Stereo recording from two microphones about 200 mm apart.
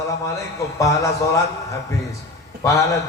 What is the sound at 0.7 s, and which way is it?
Speech, 15° left (ahead or behind).